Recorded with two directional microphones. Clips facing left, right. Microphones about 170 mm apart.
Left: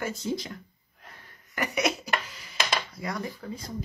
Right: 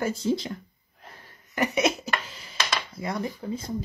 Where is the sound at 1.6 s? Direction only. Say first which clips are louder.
Right 4 dB; 25° right (ahead or behind).